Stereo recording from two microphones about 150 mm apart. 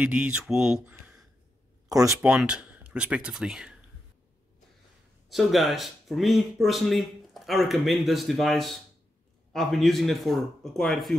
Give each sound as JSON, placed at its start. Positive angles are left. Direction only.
{"t": 0.0, "sound": "speech", "side_deg": -10}
{"t": 1.9, "sound": "speech", "side_deg": -25}
{"t": 2.2, "sound": "speech", "side_deg": -5}
{"t": 5.3, "sound": "speech", "side_deg": 0}